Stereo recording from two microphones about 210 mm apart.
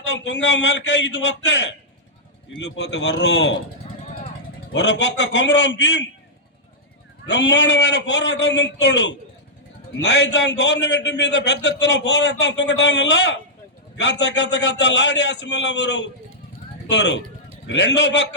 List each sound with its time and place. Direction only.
0.0 s a man's voice: 60° left (ahead or behind)
4.7 s a man's voice: 55° left (ahead or behind)
7.3 s a man's voice: 55° left (ahead or behind)